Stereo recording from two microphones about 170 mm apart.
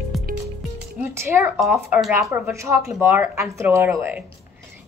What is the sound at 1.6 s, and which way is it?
A woman's voice, 15° right (ahead or behind).